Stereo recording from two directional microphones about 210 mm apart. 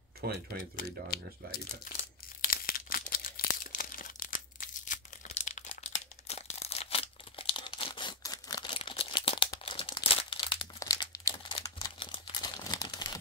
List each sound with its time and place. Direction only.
0.2 s speech: 50° right (ahead or behind)
1.1 s speech: 45° left (ahead or behind)
2.4 s crumpling: 45° left (ahead or behind); by 13.2 s 20° left (ahead or behind)